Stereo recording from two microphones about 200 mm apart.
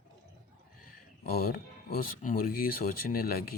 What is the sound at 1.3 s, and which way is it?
Speech, 50° left (ahead or behind).